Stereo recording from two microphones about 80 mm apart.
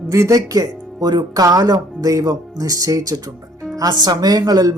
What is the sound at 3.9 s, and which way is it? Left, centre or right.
Speech, right.